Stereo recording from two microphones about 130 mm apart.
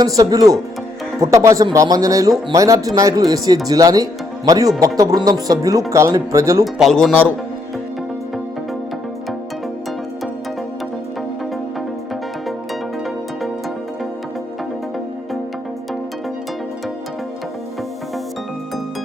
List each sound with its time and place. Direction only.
0.0 s speech: 30° right (ahead or behind)
6.7 s speech: centre (ahead or behind)